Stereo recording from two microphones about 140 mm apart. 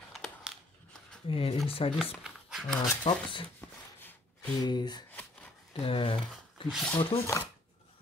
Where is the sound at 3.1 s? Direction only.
40° left (ahead or behind).